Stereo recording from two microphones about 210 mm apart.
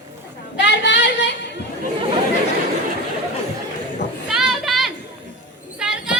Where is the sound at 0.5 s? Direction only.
55° left (ahead or behind).